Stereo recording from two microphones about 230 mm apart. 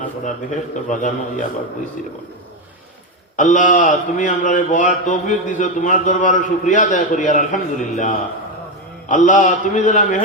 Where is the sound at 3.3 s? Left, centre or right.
Left.